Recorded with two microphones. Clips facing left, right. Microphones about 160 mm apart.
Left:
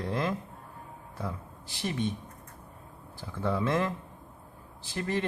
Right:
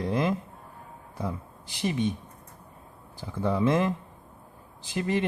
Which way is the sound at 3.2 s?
15° right (ahead or behind).